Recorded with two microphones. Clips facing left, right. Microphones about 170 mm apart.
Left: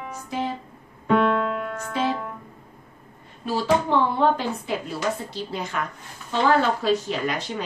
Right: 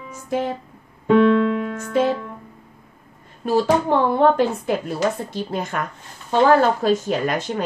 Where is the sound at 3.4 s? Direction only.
50° right (ahead or behind).